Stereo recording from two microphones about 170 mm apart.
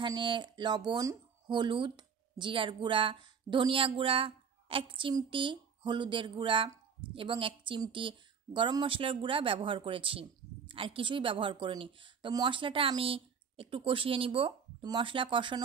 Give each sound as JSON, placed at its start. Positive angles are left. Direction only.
{"t": 0.0, "sound": "a woman's voice", "side_deg": -30}